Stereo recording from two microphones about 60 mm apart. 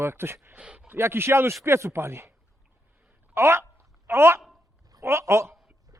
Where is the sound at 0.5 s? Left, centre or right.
Centre.